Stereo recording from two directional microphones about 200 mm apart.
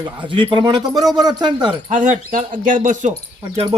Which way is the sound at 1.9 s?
40° right (ahead or behind).